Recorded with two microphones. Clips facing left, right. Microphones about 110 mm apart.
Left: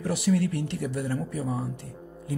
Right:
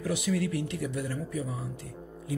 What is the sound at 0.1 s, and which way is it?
Speech, 50° left (ahead or behind).